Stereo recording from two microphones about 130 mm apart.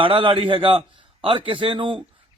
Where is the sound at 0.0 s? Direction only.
45° right (ahead or behind).